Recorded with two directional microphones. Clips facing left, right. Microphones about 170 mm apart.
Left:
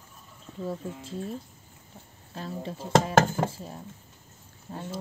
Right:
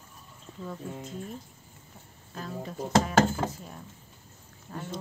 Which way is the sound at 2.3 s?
30° left (ahead or behind).